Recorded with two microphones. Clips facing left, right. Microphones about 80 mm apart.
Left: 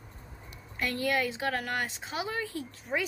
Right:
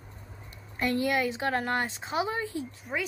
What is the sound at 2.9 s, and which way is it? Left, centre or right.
Speech, centre.